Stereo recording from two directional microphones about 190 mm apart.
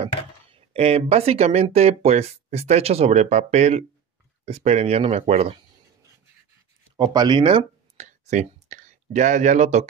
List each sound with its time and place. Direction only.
0.0 s speech: 30° right (ahead or behind)
7.0 s speech: 20° right (ahead or behind); by 9.8 s 35° right (ahead or behind)